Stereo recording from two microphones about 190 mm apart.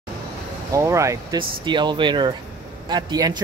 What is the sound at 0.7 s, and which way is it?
Speech, 15° right (ahead or behind).